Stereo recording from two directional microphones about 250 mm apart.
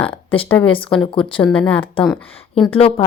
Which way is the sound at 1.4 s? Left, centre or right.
Centre.